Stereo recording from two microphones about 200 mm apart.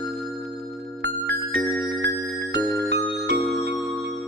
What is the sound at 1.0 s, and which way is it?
Music, 60° right (ahead or behind).